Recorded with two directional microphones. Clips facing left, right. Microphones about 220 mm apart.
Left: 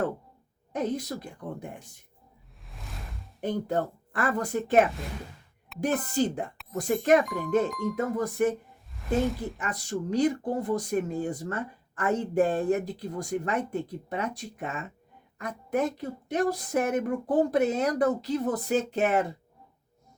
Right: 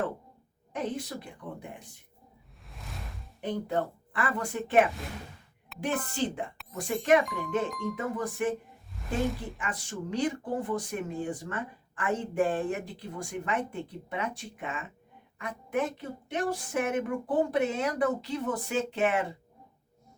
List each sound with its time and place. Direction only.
0.7 s speech: 40° left (ahead or behind)
2.6 s music: centre (ahead or behind)
3.4 s speech: 45° left (ahead or behind)
5.8 s speech: 40° left (ahead or behind)
9.0 s speech: centre (ahead or behind)
9.6 s speech: 40° left (ahead or behind)